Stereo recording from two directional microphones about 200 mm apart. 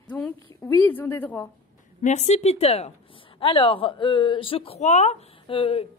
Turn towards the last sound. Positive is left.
turn(degrees=25)  # may be behind; listen again after turning